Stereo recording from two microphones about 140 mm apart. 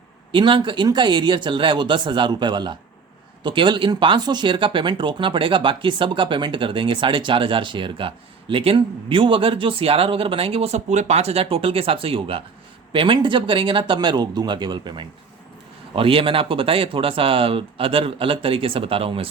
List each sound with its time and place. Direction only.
0.3 s speech: 35° right (ahead or behind)